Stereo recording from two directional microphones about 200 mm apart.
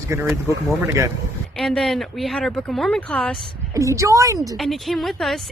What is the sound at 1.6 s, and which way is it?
Speech, 5° left (ahead or behind).